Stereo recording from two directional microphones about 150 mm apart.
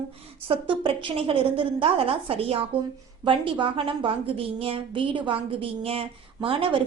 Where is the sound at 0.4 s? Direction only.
35° right (ahead or behind).